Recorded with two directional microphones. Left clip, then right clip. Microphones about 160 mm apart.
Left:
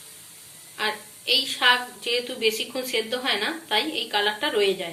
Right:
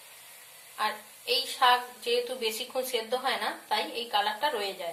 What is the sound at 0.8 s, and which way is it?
A woman's voice, 50° right (ahead or behind).